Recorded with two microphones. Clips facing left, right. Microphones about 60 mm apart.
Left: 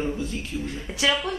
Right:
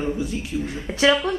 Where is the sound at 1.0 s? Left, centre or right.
Right.